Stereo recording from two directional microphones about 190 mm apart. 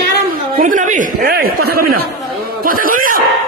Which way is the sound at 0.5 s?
45° right (ahead or behind).